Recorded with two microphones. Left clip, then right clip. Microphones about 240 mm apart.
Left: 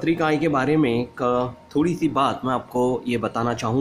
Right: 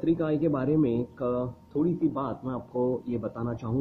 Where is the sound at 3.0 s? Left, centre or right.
Centre.